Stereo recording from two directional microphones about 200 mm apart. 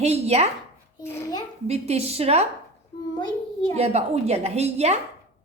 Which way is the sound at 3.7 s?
30° right (ahead or behind).